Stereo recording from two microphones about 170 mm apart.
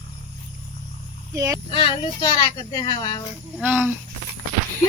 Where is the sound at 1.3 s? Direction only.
20° right (ahead or behind).